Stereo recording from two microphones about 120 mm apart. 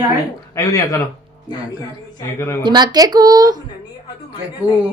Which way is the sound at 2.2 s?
25° left (ahead or behind).